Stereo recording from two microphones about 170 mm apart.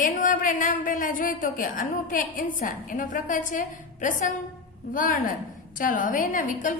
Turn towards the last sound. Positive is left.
turn(degrees=50)  # may be behind; listen again after turning